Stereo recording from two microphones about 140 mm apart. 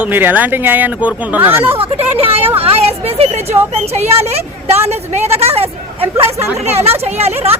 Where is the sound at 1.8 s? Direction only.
45° right (ahead or behind).